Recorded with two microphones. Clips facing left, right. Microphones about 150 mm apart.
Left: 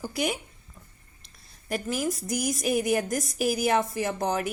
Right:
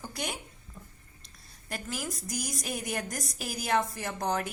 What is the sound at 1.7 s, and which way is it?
A woman's voice, 15° left (ahead or behind).